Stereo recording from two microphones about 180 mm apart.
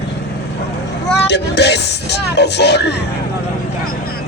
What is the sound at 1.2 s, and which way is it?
Music, 70° left (ahead or behind).